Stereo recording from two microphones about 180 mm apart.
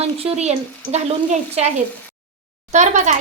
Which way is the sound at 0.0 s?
35° right (ahead or behind).